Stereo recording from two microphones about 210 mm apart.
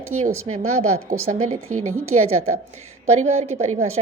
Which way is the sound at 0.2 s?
35° right (ahead or behind).